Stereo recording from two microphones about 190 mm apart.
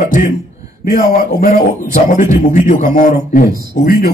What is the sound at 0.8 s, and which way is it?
A man's voice, 50° left (ahead or behind).